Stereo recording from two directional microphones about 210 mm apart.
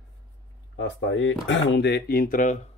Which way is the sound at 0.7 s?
60° left (ahead or behind).